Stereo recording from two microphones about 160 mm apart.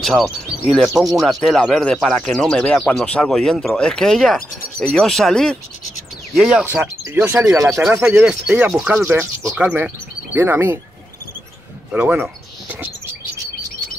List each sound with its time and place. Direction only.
0.0 s speech: centre (ahead or behind); by 7.8 s 20° right (ahead or behind)
7.8 s speech: 5° right (ahead or behind)
11.9 s bird: 10° right (ahead or behind)